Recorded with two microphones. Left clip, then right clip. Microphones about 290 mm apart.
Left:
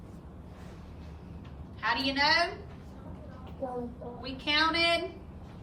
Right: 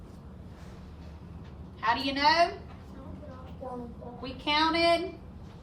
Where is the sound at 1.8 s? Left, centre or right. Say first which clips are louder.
Right 2 dB; centre.